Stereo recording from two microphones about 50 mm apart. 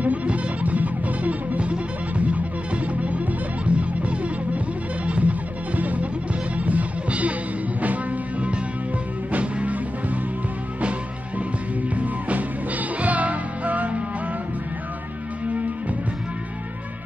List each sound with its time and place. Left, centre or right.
0.0 s music: right